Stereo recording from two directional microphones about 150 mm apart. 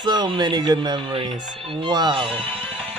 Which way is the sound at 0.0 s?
30° right (ahead or behind).